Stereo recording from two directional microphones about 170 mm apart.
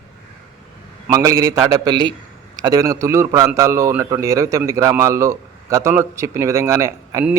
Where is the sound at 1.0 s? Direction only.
20° right (ahead or behind).